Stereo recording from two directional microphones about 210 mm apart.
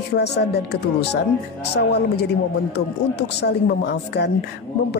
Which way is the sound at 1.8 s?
50° left (ahead or behind).